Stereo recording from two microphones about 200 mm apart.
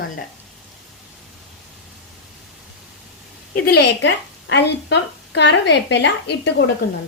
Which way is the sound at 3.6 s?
55° left (ahead or behind).